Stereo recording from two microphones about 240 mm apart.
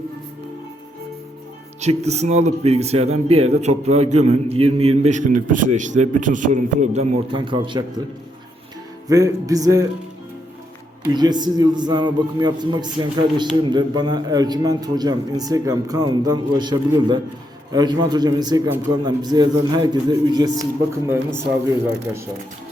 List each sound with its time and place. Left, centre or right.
1.8 s speech: right
9.0 s a man's voice: centre
11.0 s a man's voice: centre